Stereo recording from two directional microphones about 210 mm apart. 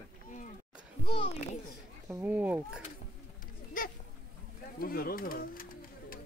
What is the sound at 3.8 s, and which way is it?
Goat, 40° left (ahead or behind).